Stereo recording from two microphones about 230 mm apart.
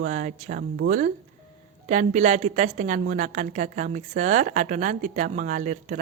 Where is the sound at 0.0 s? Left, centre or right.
Right.